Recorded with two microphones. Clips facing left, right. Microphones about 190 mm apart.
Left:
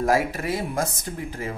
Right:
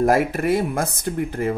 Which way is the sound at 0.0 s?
55° right (ahead or behind).